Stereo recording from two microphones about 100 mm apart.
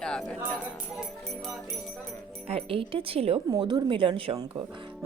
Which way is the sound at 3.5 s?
45° right (ahead or behind).